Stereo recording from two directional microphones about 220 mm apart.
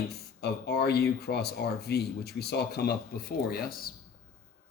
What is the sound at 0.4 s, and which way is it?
Speech, 50° left (ahead or behind).